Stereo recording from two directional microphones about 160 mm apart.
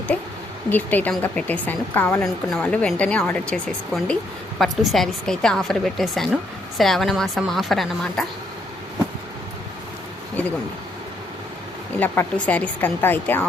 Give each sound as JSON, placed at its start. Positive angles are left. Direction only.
{"t": 0.7, "sound": "a woman's voice", "side_deg": 10}
{"t": 11.9, "sound": "speech", "side_deg": 10}